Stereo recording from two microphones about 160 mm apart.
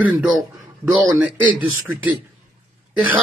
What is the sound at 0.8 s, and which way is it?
Speech, 15° right (ahead or behind).